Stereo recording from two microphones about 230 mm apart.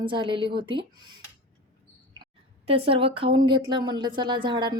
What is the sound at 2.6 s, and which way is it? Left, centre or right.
Speech, right.